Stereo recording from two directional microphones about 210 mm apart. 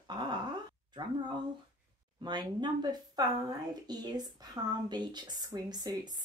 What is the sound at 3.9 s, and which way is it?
Speech, 20° right (ahead or behind).